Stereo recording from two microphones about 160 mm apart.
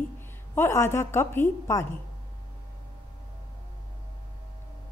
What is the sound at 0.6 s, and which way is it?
A woman's voice, 15° left (ahead or behind).